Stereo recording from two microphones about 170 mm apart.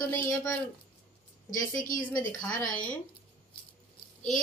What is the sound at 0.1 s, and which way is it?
Speech, 15° left (ahead or behind).